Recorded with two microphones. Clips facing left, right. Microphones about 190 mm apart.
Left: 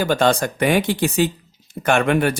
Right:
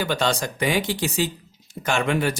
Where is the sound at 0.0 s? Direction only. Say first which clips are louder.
Left 6 dB; 50° left (ahead or behind).